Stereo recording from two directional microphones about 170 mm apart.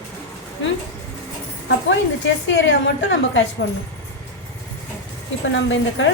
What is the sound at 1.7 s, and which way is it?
A woman's voice, 90° left.